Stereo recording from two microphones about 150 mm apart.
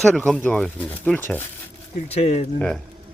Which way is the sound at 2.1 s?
45° left (ahead or behind).